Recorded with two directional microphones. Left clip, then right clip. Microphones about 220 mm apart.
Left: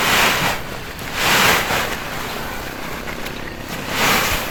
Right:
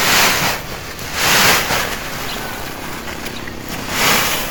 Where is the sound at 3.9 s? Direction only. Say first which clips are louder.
Right 2 dB; centre (ahead or behind).